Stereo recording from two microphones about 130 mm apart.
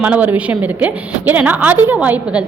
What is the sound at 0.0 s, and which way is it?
A woman's voice, 10° right (ahead or behind).